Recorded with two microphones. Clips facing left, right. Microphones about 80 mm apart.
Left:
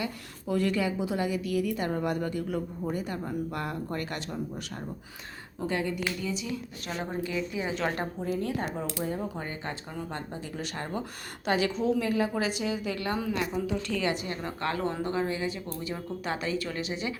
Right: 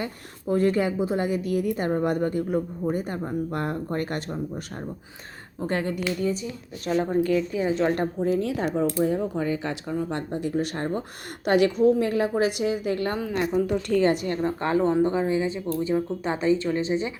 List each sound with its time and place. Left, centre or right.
0.0 s a woman's voice: right
5.6 s speech: right
7.6 s speech: right
7.9 s speech: right
8.7 s a woman's voice: right
9.4 s speech: right
9.9 s a woman's voice: right
14.6 s speech: centre
15.7 s speech: right